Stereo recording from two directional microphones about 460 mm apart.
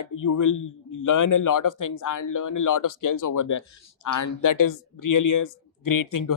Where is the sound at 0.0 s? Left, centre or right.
Left.